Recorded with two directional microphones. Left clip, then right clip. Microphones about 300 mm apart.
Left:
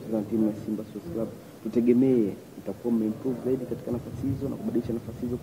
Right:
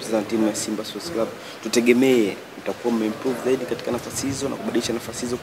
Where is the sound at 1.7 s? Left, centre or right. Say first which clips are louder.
Right 6 dB; centre.